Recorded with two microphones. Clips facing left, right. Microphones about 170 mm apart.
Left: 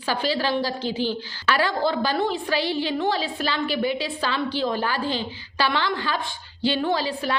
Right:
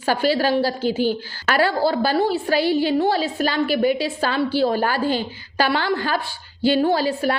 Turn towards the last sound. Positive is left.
turn(degrees=-45)  # may be behind; listen again after turning